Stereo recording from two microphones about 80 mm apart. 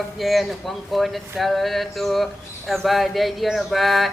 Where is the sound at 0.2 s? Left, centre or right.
Centre.